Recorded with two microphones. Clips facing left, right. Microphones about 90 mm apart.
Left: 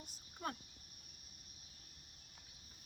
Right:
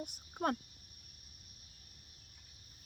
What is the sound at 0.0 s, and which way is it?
Speech, 60° right (ahead or behind).